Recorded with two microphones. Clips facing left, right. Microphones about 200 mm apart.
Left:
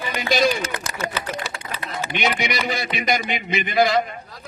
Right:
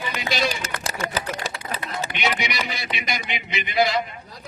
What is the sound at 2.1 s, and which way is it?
A man's voice, 50° left (ahead or behind).